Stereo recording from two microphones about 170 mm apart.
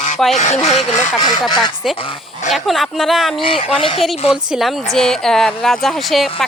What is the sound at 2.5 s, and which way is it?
Speech, centre (ahead or behind).